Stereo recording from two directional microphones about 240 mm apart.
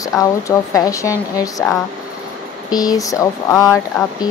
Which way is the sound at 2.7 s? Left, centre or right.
Centre.